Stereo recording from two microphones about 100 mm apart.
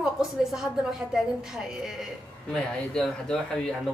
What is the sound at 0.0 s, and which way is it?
A woman's voice, 5° right (ahead or behind).